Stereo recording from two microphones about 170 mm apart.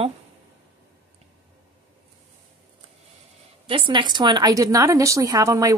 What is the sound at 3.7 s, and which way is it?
A woman's voice, 30° right (ahead or behind).